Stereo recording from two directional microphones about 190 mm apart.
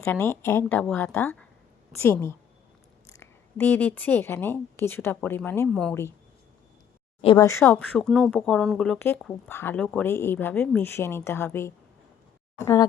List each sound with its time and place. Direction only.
0.0 s a woman's voice: 15° left (ahead or behind)
5.9 s speech: 15° left (ahead or behind)
7.2 s speech: 30° left (ahead or behind)
7.4 s speech: 15° left (ahead or behind)